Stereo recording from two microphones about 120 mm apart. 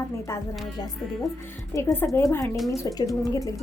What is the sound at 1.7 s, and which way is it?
A woman's voice, 25° left (ahead or behind).